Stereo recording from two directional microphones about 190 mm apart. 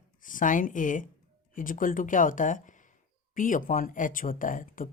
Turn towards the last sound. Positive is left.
turn(degrees=45)  # may be behind; listen again after turning